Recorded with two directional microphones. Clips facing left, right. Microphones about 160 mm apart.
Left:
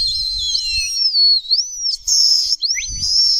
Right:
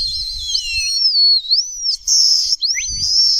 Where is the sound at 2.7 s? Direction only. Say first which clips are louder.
Even; 25° left (ahead or behind).